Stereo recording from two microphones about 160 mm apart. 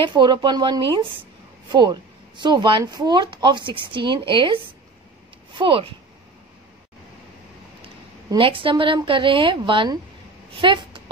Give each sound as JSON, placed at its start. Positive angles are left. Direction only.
{"t": 0.0, "sound": "speech", "side_deg": -30}
{"t": 8.3, "sound": "a woman's voice", "side_deg": -35}